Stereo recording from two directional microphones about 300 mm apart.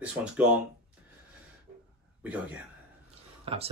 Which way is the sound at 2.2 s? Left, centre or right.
Centre.